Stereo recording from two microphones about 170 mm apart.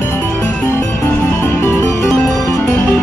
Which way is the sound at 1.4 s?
15° left (ahead or behind).